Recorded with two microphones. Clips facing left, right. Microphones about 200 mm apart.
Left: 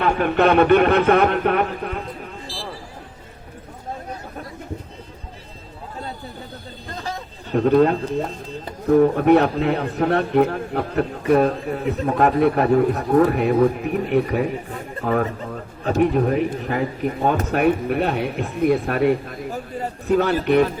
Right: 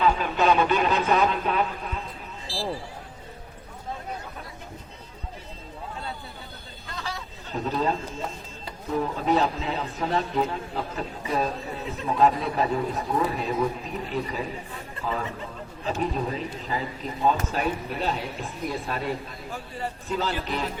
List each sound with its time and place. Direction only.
0.0 s speech: 60° left (ahead or behind)
7.5 s speech: 60° left (ahead or behind)